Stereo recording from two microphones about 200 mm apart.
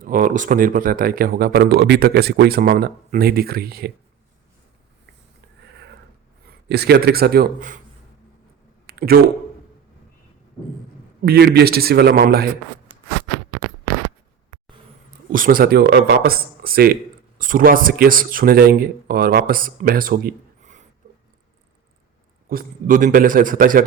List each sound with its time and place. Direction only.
0.0 s speech: 40° right (ahead or behind)
6.7 s speech: 55° right (ahead or behind)
8.9 s speech: 50° right (ahead or behind)
11.3 s speech: 55° right (ahead or behind)
15.3 s speech: 45° right (ahead or behind)
22.4 s speech: 45° right (ahead or behind)